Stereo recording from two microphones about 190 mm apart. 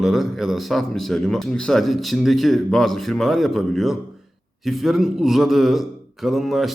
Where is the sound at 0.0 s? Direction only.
Centre (ahead or behind).